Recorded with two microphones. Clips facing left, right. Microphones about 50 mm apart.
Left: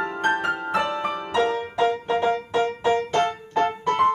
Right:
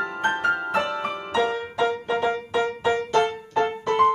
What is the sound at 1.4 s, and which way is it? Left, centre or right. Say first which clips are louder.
Music: left 1 dB; centre.